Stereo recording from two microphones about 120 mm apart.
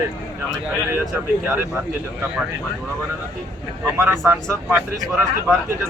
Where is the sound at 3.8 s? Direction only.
20° right (ahead or behind).